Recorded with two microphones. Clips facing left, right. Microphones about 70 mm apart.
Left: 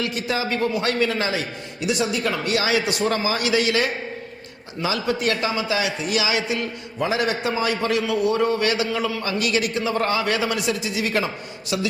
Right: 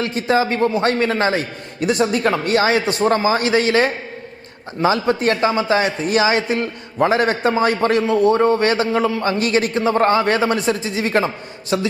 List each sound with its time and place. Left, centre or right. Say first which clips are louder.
0.0 s a man's voice: right 7 dB; right